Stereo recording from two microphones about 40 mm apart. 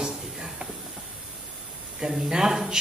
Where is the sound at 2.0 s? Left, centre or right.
Centre.